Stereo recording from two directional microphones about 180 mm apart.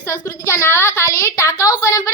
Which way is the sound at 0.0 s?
15° left (ahead or behind).